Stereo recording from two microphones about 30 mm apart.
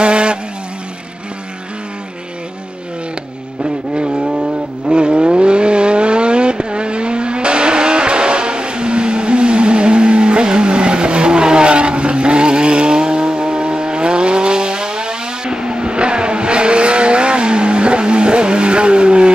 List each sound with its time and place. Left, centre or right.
0.0 s vehicle: right
3.9 s vehicle: right